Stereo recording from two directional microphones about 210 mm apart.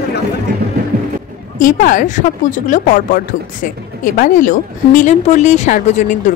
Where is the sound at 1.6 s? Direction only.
40° left (ahead or behind).